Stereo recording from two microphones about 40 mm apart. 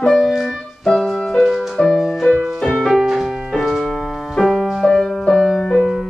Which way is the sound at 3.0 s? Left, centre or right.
Centre.